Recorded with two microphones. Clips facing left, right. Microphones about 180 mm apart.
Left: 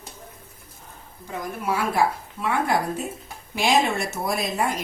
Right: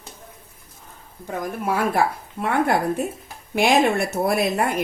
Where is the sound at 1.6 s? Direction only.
55° right (ahead or behind).